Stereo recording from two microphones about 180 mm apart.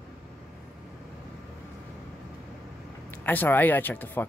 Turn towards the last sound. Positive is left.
turn(degrees=10)  # may be behind; listen again after turning